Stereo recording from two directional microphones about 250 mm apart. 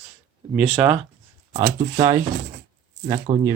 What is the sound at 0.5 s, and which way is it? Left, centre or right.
Speech, centre.